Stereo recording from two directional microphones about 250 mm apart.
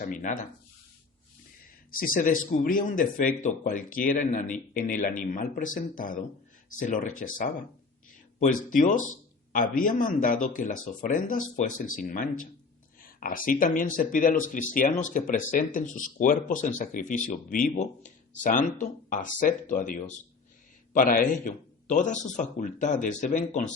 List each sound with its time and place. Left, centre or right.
0.0 s speech: left
2.1 s a man's voice: left